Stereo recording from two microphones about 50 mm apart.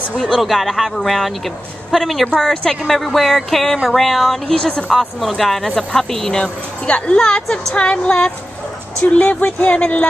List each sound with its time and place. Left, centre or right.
0.3 s a woman's voice: centre
2.2 s a woman's voice: centre